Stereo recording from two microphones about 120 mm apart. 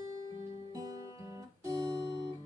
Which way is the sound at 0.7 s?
30° right (ahead or behind).